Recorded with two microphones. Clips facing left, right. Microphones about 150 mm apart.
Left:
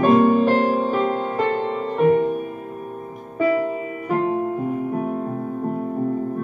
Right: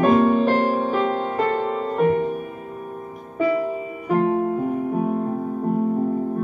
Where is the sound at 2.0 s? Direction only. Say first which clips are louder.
Left 3 dB; 50° left (ahead or behind).